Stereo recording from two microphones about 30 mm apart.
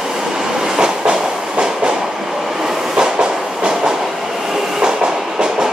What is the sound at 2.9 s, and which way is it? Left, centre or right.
Train, right.